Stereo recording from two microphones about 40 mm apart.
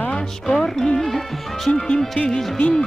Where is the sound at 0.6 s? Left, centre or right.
Centre.